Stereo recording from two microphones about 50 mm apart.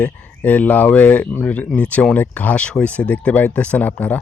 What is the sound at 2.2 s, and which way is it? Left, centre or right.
Speech, left.